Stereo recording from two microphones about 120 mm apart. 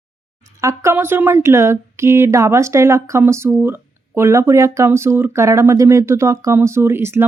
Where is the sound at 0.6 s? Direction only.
25° right (ahead or behind).